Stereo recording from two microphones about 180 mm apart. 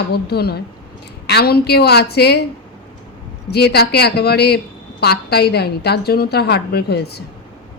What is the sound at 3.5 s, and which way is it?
A woman's voice, 65° left (ahead or behind).